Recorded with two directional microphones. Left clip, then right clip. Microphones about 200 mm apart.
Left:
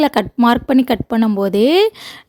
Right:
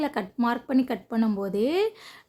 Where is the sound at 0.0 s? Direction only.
50° left (ahead or behind).